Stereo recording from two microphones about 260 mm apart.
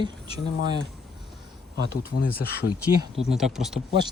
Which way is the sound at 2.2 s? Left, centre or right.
Left.